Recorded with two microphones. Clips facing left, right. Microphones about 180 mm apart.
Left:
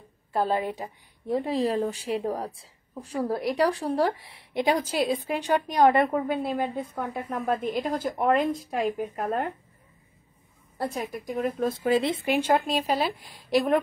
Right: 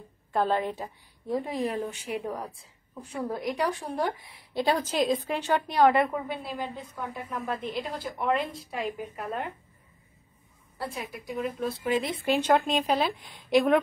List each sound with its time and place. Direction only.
0.3 s a woman's voice: 5° left (ahead or behind)
1.2 s a woman's voice: 25° left (ahead or behind)
6.1 s a woman's voice: 45° left (ahead or behind)
10.8 s a woman's voice: 45° left (ahead or behind)
12.3 s a woman's voice: 10° left (ahead or behind)